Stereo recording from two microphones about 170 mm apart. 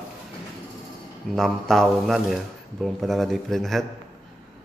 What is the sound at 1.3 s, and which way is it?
Speech, centre (ahead or behind).